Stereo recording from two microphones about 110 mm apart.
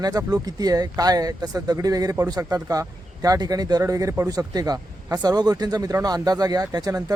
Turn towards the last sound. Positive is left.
turn(degrees=-35)  # may be behind; listen again after turning